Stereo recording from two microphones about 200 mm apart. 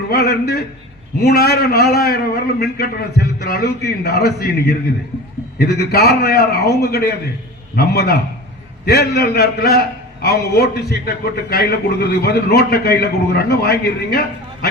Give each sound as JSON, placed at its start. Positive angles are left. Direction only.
{"t": 0.1, "sound": "a man's voice", "side_deg": 55}